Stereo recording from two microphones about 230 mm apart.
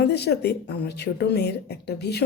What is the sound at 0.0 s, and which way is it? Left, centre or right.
A woman's voice, left.